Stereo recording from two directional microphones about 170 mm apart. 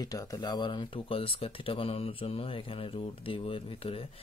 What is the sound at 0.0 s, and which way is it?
Speech, 20° left (ahead or behind).